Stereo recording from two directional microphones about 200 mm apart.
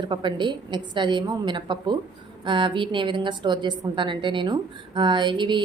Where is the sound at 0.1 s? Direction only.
25° right (ahead or behind).